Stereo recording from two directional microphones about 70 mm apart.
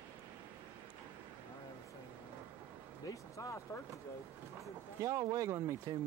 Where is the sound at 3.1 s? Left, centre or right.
Left.